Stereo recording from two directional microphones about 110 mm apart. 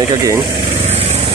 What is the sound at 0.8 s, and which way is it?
Vehicle, 75° right (ahead or behind).